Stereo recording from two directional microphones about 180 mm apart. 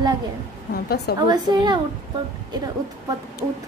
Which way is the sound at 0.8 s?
65° left (ahead or behind).